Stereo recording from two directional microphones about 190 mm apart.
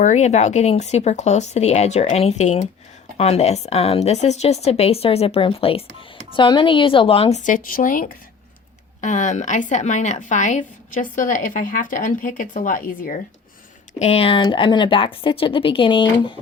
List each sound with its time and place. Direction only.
0.0 s speech: 40° left (ahead or behind)
14.0 s speech: 30° left (ahead or behind)